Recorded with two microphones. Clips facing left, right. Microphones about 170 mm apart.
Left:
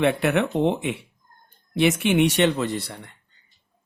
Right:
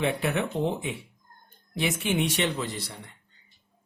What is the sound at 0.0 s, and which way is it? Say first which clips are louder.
Speech: left 6 dB; 70° left (ahead or behind).